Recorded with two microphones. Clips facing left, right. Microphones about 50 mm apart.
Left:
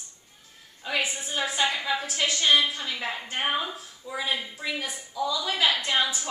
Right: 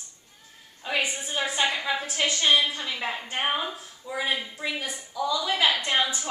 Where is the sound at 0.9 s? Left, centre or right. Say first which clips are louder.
Right 1 dB; centre.